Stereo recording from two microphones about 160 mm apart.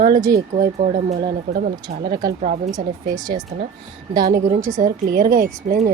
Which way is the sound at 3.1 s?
25° right (ahead or behind).